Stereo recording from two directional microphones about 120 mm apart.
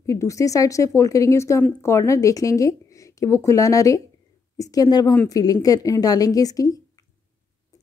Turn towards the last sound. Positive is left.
turn(degrees=30)  # may be behind; listen again after turning